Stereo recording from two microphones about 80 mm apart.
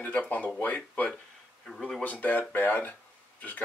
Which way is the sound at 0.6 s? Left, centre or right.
Centre.